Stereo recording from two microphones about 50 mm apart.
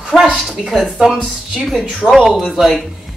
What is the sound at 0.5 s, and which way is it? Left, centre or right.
Speech, centre.